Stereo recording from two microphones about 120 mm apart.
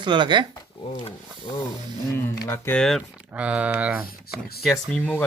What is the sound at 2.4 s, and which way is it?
Speech, 20° left (ahead or behind).